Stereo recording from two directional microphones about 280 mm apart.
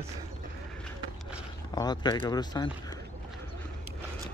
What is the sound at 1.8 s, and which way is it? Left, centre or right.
Speech, centre.